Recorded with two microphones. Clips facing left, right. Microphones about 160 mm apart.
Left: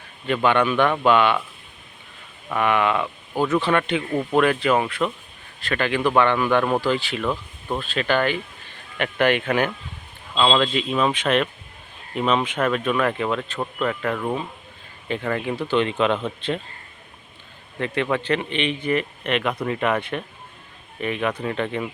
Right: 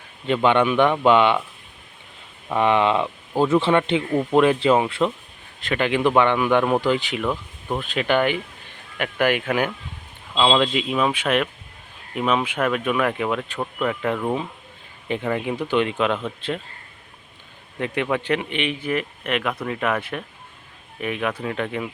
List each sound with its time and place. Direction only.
0.4 s speech: 20° right (ahead or behind)
2.5 s speech: 25° right (ahead or behind); by 16.6 s 5° right (ahead or behind)
17.7 s a man's voice: 10° right (ahead or behind)